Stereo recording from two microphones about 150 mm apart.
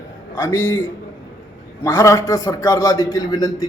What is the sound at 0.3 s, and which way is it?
Speech, 15° left (ahead or behind).